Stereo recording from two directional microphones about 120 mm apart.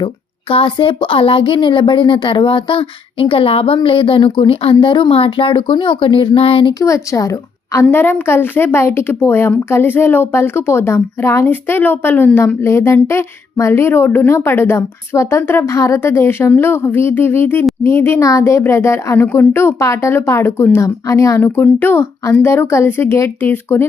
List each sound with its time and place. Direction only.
0.5 s speech: 45° left (ahead or behind)
6.7 s a woman's voice: 25° left (ahead or behind)